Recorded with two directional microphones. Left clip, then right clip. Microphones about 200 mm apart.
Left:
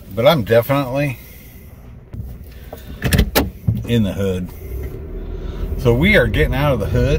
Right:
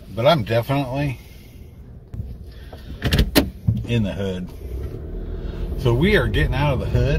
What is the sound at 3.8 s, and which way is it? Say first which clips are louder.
Speech: left 6 dB; 20° left (ahead or behind).